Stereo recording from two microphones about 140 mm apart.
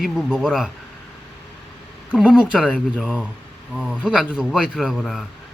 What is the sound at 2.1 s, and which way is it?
Speech, 5° right (ahead or behind).